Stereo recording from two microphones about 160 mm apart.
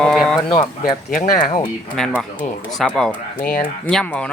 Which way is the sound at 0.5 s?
60° left (ahead or behind).